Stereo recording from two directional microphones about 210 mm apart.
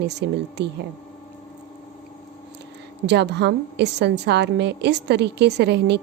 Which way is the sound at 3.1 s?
55° right (ahead or behind).